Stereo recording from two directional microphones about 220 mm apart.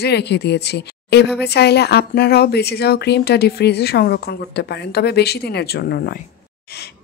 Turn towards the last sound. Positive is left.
turn(degrees=45)  # may be behind; listen again after turning